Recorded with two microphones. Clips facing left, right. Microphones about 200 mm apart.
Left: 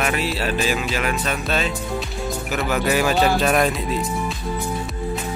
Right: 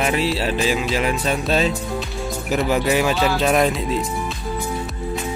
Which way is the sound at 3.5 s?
Centre (ahead or behind).